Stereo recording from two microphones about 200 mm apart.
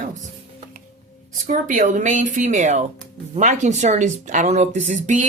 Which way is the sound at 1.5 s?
40° right (ahead or behind).